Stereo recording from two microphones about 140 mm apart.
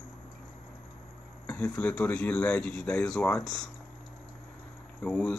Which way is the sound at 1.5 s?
10° left (ahead or behind).